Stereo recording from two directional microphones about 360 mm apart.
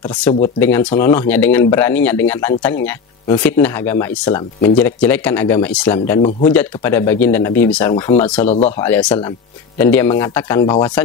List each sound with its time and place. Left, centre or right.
0.1 s speech: centre
8.8 s speech: centre